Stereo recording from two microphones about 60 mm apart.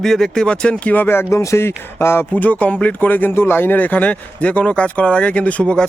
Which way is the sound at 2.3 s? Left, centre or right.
Left.